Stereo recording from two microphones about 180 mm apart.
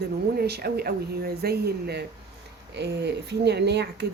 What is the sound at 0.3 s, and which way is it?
Speech, 60° right (ahead or behind).